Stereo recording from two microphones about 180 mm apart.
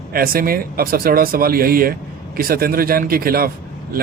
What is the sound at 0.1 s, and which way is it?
Speech, 55° right (ahead or behind).